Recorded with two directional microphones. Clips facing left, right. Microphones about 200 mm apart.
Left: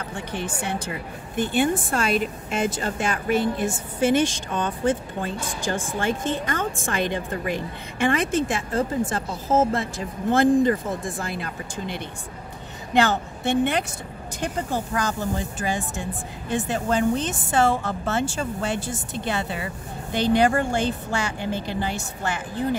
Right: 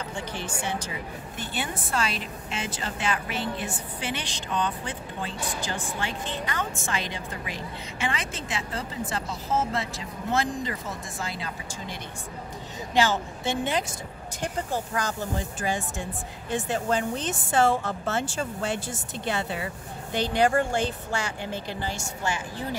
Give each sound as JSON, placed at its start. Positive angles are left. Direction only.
{"t": 0.1, "sound": "a woman's voice", "side_deg": 55}
{"t": 16.9, "sound": "a woman's voice", "side_deg": 65}